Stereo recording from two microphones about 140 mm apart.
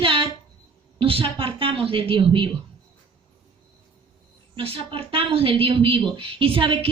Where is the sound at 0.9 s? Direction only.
40° right (ahead or behind).